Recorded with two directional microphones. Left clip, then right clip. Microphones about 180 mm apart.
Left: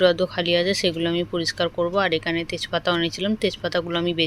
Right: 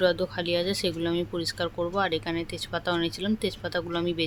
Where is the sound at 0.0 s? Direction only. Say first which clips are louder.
Left 6 dB; 15° left (ahead or behind).